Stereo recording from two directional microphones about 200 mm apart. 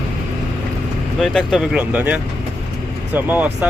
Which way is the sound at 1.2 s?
Centre (ahead or behind).